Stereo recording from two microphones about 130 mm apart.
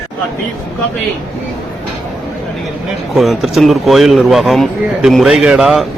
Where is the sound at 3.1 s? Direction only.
Centre (ahead or behind).